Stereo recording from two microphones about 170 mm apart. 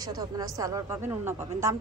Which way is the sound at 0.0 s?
20° right (ahead or behind).